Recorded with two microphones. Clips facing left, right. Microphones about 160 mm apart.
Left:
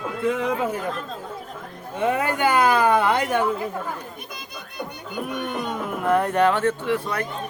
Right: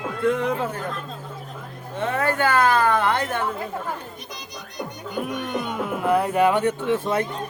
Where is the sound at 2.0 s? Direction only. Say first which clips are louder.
Left 1 dB; 15° left (ahead or behind).